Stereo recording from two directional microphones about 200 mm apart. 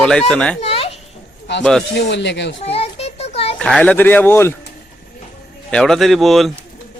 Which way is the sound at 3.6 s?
5° left (ahead or behind).